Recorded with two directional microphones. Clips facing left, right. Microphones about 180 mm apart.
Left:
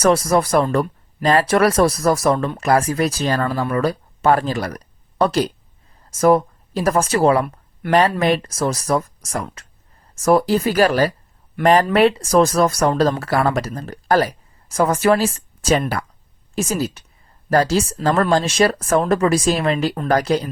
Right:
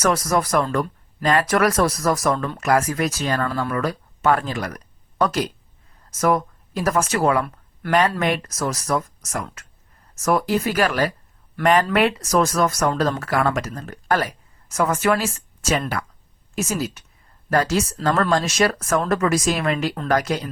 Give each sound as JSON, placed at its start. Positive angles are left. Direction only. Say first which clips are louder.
{"t": 0.0, "sound": "speech", "louder": "left 5 dB", "side_deg": 30}